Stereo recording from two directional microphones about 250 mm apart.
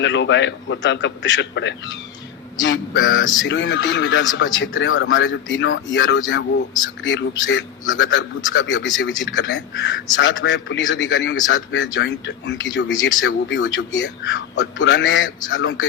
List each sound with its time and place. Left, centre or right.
0.0 s a man's voice: left